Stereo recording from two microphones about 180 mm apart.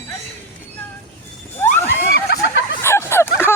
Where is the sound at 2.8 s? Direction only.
15° left (ahead or behind).